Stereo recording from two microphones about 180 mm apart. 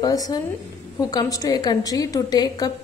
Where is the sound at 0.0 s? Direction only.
20° left (ahead or behind).